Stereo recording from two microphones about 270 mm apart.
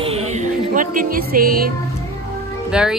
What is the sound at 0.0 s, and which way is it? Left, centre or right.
Music, right.